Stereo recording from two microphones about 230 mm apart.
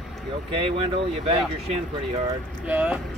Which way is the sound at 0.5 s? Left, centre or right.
Right.